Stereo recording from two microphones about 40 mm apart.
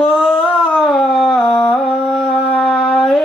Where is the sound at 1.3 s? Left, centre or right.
Left.